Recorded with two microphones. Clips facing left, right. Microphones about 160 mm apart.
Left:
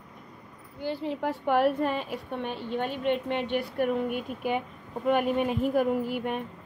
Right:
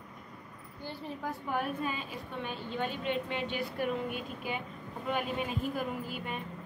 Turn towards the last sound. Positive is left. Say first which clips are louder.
# left 9 dB
turn(degrees=60)  # may be behind; listen again after turning